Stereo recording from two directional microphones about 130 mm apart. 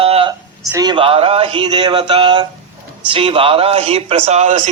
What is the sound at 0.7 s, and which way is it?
Speech, 30° right (ahead or behind).